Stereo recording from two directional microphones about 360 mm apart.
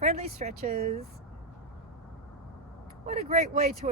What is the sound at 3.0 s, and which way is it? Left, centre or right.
Speech, right.